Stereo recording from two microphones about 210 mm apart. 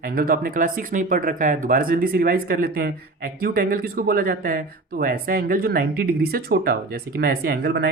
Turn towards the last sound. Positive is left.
turn(degrees=-50)  # may be behind; listen again after turning